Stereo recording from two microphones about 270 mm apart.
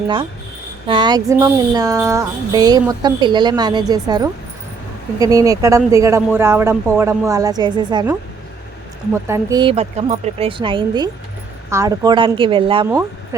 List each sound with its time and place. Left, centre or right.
0.9 s music: centre
9.1 s music: centre